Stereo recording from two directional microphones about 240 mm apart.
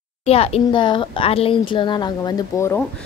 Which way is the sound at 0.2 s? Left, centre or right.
Left.